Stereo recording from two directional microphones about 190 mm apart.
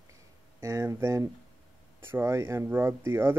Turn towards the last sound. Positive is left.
turn(degrees=-10)  # may be behind; listen again after turning